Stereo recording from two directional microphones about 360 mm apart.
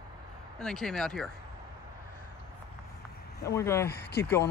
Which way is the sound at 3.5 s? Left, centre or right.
Centre.